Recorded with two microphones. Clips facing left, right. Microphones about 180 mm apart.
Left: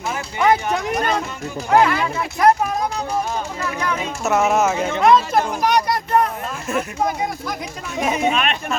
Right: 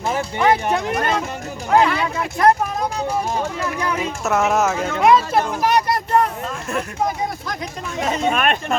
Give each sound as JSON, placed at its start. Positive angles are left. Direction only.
{"t": 0.3, "sound": "speech", "side_deg": 0}
{"t": 4.2, "sound": "speech", "side_deg": 0}
{"t": 8.3, "sound": "speech", "side_deg": -50}